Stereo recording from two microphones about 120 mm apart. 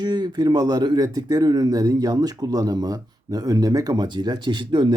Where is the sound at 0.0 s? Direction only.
35° right (ahead or behind).